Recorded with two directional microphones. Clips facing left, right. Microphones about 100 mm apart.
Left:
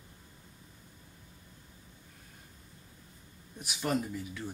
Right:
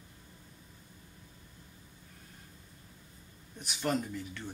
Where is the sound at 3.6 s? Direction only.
5° left (ahead or behind).